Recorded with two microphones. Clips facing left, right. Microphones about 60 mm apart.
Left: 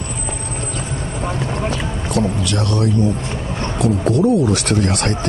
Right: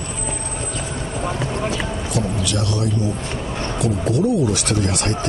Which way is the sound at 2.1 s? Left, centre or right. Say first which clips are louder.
Left 4 dB; left.